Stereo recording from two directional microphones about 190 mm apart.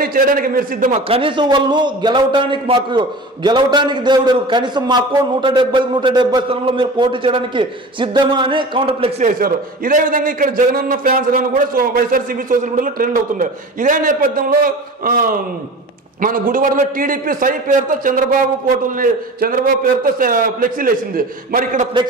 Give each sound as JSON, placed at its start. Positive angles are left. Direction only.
{"t": 0.0, "sound": "a man's voice", "side_deg": -50}
{"t": 1.0, "sound": "a man's voice", "side_deg": -30}
{"t": 9.4, "sound": "a man's voice", "side_deg": -45}